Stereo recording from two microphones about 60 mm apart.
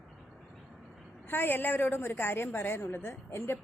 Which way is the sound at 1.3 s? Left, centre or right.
Left.